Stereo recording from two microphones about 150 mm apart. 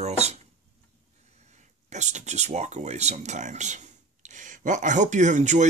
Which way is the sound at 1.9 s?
50° right (ahead or behind).